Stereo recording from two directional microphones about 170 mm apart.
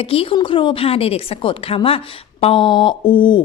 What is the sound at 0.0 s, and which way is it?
A woman's voice, 35° left (ahead or behind).